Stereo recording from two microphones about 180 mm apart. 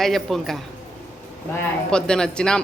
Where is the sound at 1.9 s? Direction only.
5° left (ahead or behind).